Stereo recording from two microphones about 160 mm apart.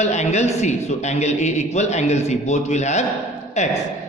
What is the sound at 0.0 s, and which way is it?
A man's voice, 45° left (ahead or behind).